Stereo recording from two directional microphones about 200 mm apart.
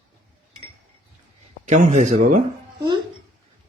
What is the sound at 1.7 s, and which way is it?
Speech, 40° right (ahead or behind).